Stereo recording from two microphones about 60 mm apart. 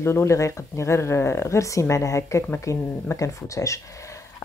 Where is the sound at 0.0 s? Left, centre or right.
Left.